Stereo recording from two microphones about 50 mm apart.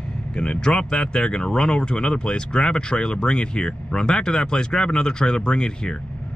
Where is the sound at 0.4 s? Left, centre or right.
Centre.